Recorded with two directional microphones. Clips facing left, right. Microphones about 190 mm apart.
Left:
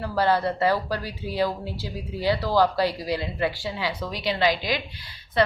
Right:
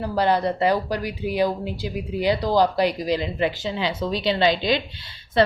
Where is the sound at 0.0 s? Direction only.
15° right (ahead or behind).